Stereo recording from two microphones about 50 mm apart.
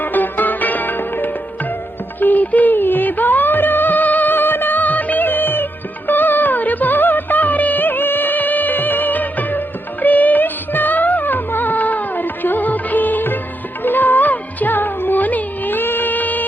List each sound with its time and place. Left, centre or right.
0.0 s music: left